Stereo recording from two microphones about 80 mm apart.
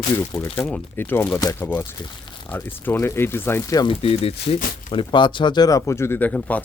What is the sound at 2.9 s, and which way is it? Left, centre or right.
Speech, left.